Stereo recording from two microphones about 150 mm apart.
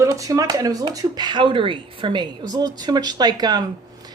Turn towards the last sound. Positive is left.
turn(degrees=-25)  # may be behind; listen again after turning